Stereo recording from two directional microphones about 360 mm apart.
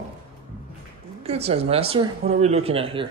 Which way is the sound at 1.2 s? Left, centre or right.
Centre.